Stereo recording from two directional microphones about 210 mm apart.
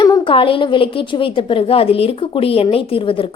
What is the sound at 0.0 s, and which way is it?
A woman's voice, 20° left (ahead or behind).